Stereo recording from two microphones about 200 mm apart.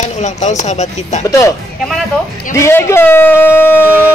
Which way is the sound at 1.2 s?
15° left (ahead or behind).